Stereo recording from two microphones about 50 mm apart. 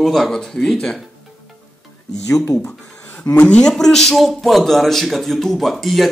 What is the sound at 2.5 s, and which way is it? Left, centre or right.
Speech, left.